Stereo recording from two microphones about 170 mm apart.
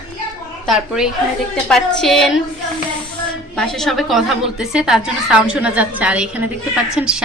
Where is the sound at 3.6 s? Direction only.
Centre (ahead or behind).